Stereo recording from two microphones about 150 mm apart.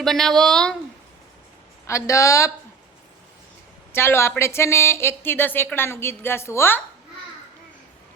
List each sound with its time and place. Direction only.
0.0 s speech: centre (ahead or behind)
1.9 s a woman's voice: 20° left (ahead or behind)
3.9 s a woman's voice: 15° left (ahead or behind)